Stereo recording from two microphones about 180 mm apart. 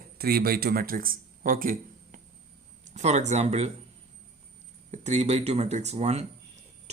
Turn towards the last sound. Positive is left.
turn(degrees=-35)  # may be behind; listen again after turning